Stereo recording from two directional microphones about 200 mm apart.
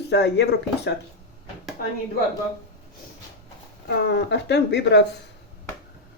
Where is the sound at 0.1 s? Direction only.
55° left (ahead or behind).